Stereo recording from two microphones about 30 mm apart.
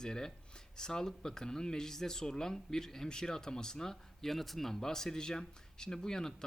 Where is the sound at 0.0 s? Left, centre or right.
Left.